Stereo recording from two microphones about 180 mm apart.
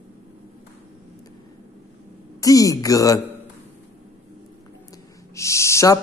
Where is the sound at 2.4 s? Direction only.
20° left (ahead or behind).